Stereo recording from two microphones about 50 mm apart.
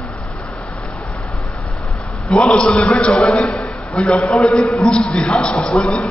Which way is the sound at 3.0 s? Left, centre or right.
Centre.